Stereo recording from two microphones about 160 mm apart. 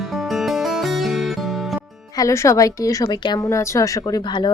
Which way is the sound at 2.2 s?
20° left (ahead or behind).